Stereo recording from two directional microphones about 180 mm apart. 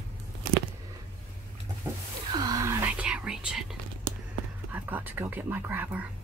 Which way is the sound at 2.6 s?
5° right (ahead or behind).